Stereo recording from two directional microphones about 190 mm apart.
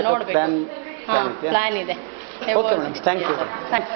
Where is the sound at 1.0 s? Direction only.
25° right (ahead or behind).